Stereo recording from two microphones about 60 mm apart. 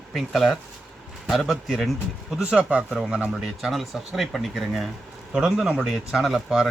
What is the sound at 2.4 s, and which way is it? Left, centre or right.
Speech, centre.